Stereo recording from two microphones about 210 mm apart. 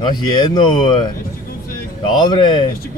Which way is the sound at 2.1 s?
20° left (ahead or behind).